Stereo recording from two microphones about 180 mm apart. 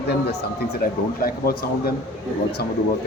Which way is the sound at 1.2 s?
55° left (ahead or behind).